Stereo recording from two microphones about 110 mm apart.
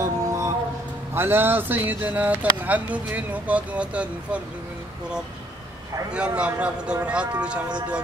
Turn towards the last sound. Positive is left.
turn(degrees=-10)  # may be behind; listen again after turning